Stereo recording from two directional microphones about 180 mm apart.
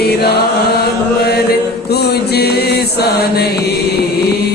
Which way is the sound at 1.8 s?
65° left (ahead or behind).